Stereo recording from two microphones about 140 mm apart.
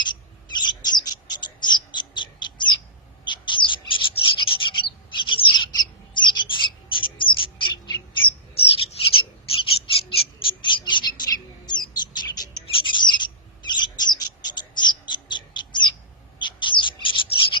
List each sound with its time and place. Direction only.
0.5 s bird: 30° left (ahead or behind)